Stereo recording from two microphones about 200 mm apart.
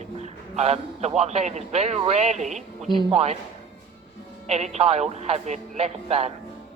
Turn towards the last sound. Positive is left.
turn(degrees=-35)  # may be behind; listen again after turning